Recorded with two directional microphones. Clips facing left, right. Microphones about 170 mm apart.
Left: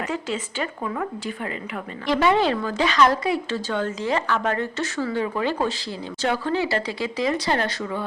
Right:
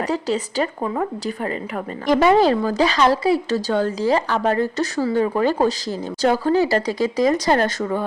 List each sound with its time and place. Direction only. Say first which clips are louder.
0.0 s a woman's voice: right 6 dB; 35° right (ahead or behind)